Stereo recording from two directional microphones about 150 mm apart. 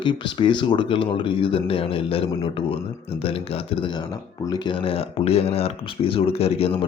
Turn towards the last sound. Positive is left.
turn(degrees=40)  # may be behind; listen again after turning